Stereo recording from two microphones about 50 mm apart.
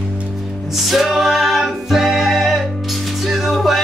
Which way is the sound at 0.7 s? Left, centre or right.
Centre.